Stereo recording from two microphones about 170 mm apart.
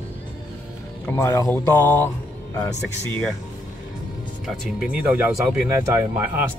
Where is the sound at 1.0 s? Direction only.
15° left (ahead or behind).